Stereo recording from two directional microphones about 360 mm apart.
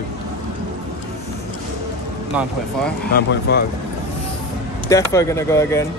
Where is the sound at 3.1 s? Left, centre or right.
Left.